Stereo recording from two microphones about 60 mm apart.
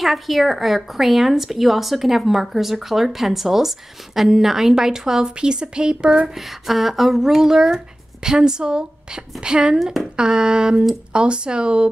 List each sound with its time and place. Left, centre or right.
0.0 s a woman's voice: centre
6.3 s speech: centre